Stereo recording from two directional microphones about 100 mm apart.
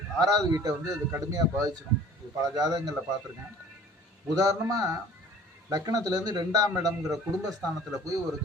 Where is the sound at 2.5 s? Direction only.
40° right (ahead or behind).